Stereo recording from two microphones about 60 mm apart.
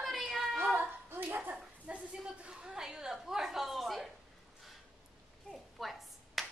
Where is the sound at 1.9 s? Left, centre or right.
Centre.